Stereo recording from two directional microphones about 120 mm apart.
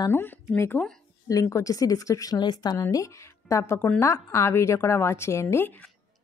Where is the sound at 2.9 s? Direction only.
25° left (ahead or behind).